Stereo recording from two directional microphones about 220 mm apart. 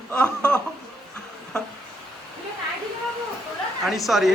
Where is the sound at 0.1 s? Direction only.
5° left (ahead or behind).